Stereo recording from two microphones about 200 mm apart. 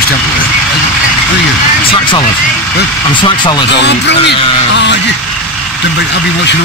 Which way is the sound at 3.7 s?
60° left (ahead or behind).